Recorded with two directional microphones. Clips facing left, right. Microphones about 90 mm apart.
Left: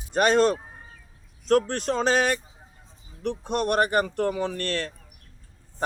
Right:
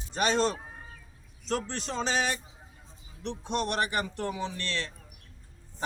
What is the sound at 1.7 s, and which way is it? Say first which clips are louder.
Speech: left 8 dB; 55° left (ahead or behind).